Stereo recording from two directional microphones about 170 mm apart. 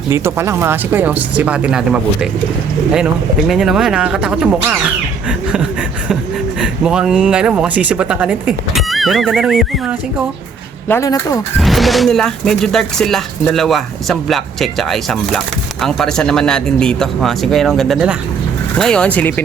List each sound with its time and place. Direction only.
0.1 s speech: 15° right (ahead or behind)
6.6 s speech: 5° right (ahead or behind)
10.8 s speech: 15° left (ahead or behind)
11.6 s speech: centre (ahead or behind)